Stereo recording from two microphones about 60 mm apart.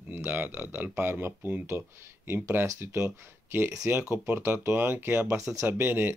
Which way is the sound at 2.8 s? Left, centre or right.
Right.